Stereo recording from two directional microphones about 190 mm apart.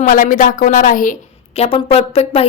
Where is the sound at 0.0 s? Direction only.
45° left (ahead or behind).